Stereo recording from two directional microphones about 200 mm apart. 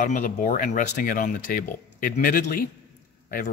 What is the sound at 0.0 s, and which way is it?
Speech, 40° left (ahead or behind).